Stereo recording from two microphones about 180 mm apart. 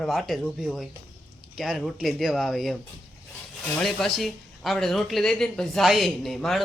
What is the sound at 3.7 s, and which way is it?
Speech, centre (ahead or behind).